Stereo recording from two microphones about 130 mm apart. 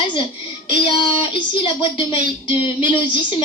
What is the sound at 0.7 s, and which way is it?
Speech, 35° left (ahead or behind).